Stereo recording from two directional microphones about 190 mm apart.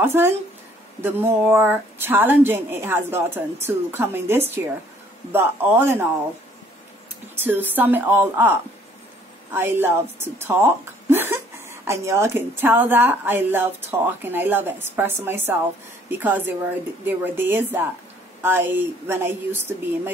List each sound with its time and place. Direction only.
0.0 s a woman's voice: 10° right (ahead or behind)
7.3 s a woman's voice: 10° right (ahead or behind)